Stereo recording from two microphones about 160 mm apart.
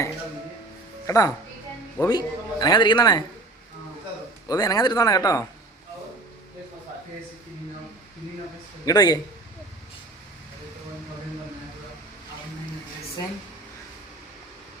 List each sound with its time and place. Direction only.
1.0 s speech: 20° left (ahead or behind)
4.4 s speech: 25° left (ahead or behind)
8.8 s a man's voice: 25° left (ahead or behind)